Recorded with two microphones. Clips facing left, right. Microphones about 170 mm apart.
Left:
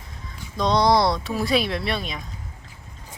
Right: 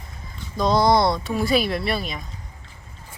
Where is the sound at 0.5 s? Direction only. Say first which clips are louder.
Right 1 dB; centre (ahead or behind).